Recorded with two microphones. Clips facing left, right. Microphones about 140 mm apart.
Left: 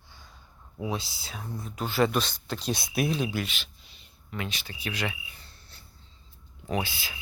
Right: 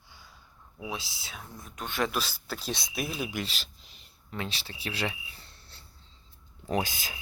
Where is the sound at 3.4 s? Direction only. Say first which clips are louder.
Left 1 dB; 35° right (ahead or behind).